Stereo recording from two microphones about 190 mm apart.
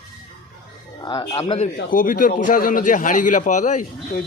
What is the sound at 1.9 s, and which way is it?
A man's voice, 50° left (ahead or behind).